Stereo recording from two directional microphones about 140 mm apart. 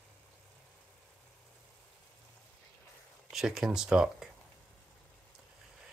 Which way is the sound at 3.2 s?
5° right (ahead or behind).